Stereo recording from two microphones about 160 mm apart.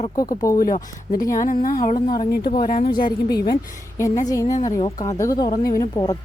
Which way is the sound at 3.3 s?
70° left (ahead or behind).